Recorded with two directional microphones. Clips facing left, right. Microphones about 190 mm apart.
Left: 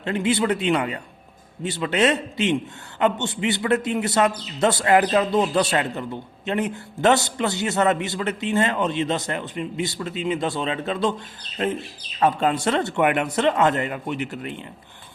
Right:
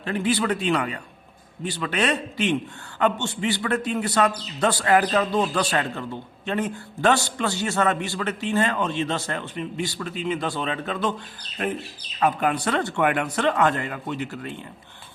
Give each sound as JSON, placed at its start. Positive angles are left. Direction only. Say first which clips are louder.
{"t": 0.0, "sound": "a man's voice", "louder": "left 2 dB", "side_deg": 25}
{"t": 12.2, "sound": "a man's voice", "louder": "left 2 dB", "side_deg": 25}